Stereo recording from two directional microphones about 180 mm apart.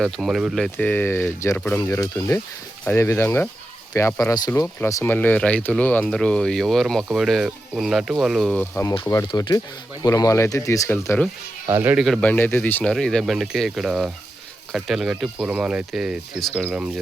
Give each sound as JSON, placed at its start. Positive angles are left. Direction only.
{"t": 0.0, "sound": "speech", "side_deg": 0}
{"t": 8.7, "sound": "speech", "side_deg": 15}
{"t": 11.7, "sound": "speech", "side_deg": -15}
{"t": 11.9, "sound": "speech", "side_deg": 0}